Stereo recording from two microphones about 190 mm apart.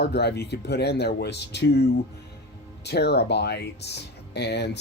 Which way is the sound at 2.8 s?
60° left (ahead or behind).